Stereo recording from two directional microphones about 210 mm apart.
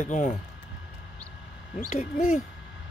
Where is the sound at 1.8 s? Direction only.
30° left (ahead or behind).